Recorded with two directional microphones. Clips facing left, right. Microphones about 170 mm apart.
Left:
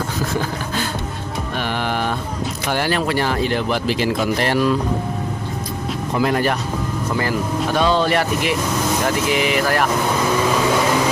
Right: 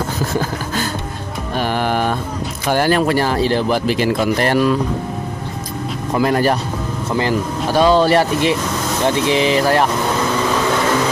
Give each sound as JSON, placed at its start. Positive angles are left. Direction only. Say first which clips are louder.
{"t": 1.8, "sound": "a sound", "louder": "right 4 dB", "side_deg": -45}
{"t": 2.7, "sound": "speech", "louder": "right 6 dB", "side_deg": -45}
{"t": 3.8, "sound": "speech", "louder": "right 3 dB", "side_deg": -50}
{"t": 6.2, "sound": "speech", "louder": "right 3 dB", "side_deg": -40}
{"t": 7.2, "sound": "speech", "louder": "right 3 dB", "side_deg": -25}
{"t": 7.8, "sound": "speech", "louder": "right 6 dB", "side_deg": -35}